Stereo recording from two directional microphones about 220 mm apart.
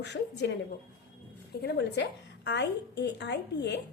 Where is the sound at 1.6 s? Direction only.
50° left (ahead or behind).